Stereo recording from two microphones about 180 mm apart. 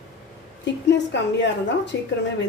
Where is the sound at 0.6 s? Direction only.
80° left.